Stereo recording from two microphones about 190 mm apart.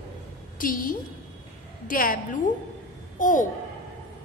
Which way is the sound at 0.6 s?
45° left (ahead or behind).